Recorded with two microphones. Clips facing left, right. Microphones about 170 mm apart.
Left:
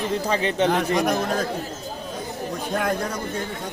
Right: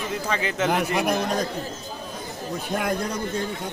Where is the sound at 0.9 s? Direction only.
5° right (ahead or behind).